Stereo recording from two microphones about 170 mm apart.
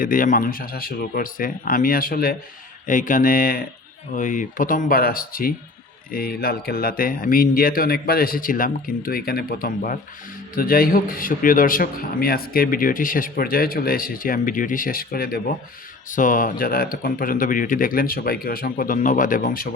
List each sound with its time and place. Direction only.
0.0 s a man's voice: 55° left (ahead or behind)